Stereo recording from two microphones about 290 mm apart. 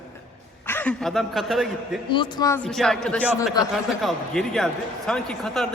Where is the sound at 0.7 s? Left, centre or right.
Centre.